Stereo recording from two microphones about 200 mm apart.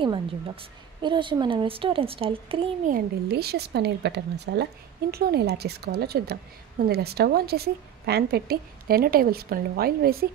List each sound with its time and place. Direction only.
1.0 s speech: 25° right (ahead or behind)
2.9 s a woman's voice: 55° right (ahead or behind)